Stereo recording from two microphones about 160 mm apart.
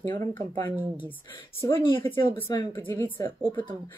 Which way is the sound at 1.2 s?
30° left (ahead or behind).